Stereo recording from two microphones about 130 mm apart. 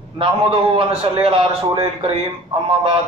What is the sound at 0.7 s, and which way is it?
A man's voice, 45° right (ahead or behind).